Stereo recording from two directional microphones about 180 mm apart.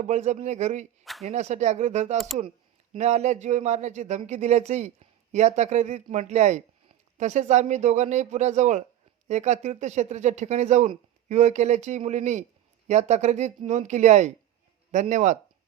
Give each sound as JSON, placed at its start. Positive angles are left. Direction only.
{"t": 0.0, "sound": "speech", "side_deg": -40}
{"t": 2.1, "sound": "speech", "side_deg": 0}
{"t": 2.9, "sound": "speech", "side_deg": -40}